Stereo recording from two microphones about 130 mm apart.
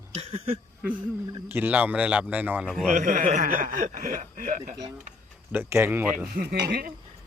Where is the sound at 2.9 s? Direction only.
90° right.